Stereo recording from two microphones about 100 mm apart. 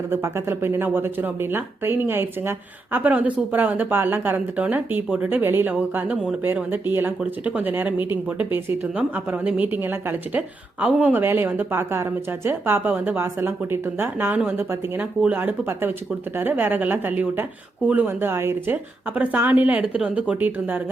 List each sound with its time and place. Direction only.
0.1 s a woman's voice: 25° right (ahead or behind)